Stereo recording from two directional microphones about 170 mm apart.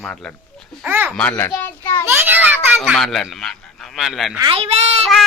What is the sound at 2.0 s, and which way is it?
Speech, 15° right (ahead or behind).